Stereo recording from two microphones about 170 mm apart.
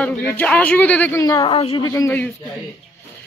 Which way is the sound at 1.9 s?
15° left (ahead or behind).